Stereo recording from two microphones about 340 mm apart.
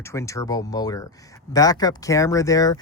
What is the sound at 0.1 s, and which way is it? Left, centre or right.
Speech, centre.